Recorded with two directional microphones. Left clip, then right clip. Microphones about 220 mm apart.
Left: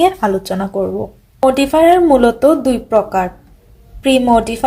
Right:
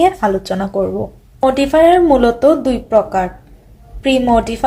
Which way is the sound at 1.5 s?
10° left (ahead or behind).